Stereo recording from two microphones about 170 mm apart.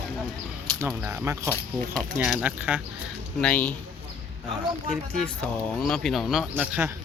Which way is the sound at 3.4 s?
10° left (ahead or behind).